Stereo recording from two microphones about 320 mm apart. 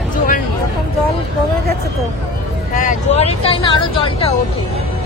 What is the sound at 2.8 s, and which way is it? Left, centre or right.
Vehicle, left.